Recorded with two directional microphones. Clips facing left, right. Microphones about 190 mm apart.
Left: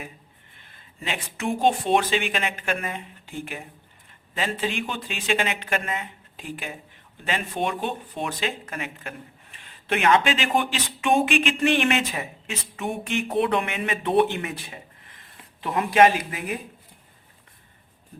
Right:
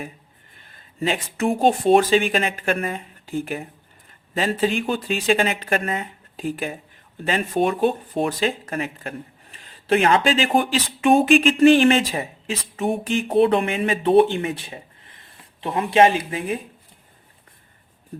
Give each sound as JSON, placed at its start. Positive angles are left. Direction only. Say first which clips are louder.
{"t": 0.6, "sound": "speech", "louder": "right 11 dB", "side_deg": -40}